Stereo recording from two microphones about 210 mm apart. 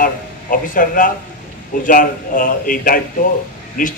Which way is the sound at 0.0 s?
40° left (ahead or behind).